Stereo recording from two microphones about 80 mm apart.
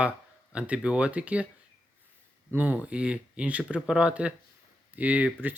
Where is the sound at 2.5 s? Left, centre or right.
Right.